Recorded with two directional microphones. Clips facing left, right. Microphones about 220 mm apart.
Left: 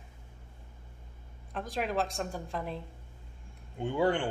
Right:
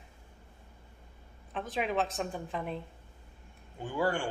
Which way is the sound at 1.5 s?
Centre (ahead or behind).